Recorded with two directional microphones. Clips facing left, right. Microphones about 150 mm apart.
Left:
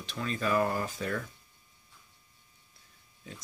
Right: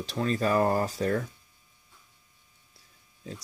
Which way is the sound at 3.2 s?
35° right (ahead or behind).